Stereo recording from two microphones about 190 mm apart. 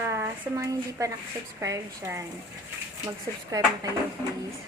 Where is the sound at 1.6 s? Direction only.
15° right (ahead or behind).